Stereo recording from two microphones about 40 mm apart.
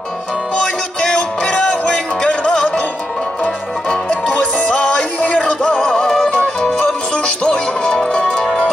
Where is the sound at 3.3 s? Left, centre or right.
Left.